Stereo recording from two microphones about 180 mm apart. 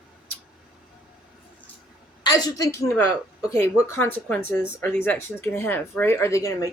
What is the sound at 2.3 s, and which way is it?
A woman's voice, 20° left (ahead or behind).